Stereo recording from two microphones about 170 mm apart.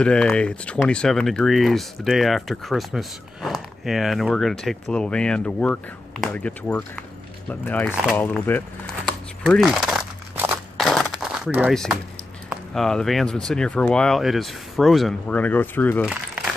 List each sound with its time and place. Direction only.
0.0 s speech: 5° left (ahead or behind)
7.9 s speech: 5° right (ahead or behind)
8.2 s speech: 10° left (ahead or behind)
9.4 s a sound: centre (ahead or behind)
11.7 s speech: 5° left (ahead or behind)